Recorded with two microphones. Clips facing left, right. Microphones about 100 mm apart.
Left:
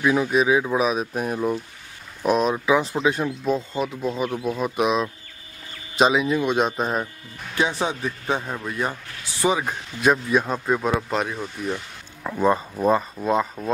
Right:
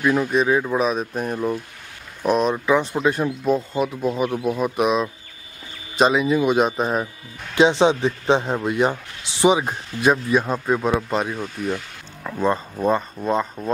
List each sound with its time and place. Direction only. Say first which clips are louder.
0.0 s speech: right 1 dB; 5° left (ahead or behind)
7.5 s speech: right 8 dB; 20° right (ahead or behind)
10.0 s speech: right 1 dB; centre (ahead or behind)